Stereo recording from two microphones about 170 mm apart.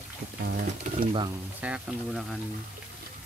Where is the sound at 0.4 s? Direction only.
60° right (ahead or behind).